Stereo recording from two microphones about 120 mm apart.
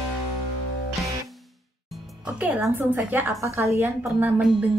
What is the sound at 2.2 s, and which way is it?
A woman's voice, 10° right (ahead or behind).